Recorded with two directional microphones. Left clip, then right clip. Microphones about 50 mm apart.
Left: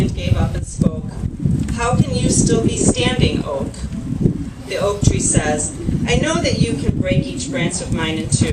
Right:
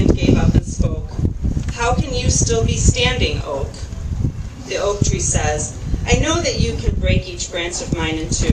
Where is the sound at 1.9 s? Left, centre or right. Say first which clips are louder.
Left 1 dB; left.